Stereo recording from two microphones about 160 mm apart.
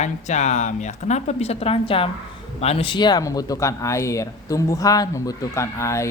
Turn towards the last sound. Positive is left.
turn(degrees=20)  # may be behind; listen again after turning